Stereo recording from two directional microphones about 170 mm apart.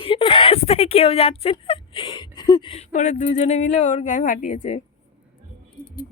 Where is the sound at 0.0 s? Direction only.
30° left (ahead or behind).